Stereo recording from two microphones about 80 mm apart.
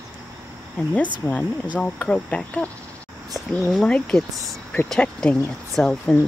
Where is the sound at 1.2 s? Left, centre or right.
Centre.